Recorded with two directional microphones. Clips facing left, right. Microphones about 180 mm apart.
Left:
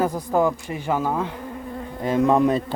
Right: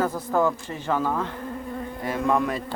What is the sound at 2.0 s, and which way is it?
Insect, 20° left (ahead or behind).